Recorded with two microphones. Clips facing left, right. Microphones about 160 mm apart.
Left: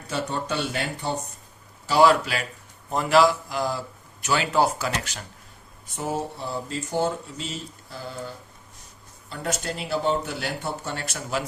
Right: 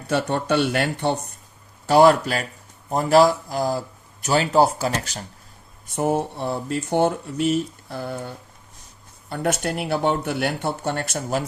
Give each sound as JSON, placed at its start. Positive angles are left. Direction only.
{"t": 0.1, "sound": "speech", "side_deg": -65}
{"t": 1.9, "sound": "speech", "side_deg": -50}
{"t": 6.0, "sound": "speech", "side_deg": -55}
{"t": 9.3, "sound": "speech", "side_deg": -60}